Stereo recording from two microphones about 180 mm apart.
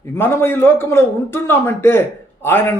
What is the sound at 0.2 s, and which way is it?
A man's voice, 10° left (ahead or behind).